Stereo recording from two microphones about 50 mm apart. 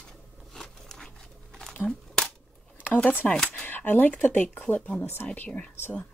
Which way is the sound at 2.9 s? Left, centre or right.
Left.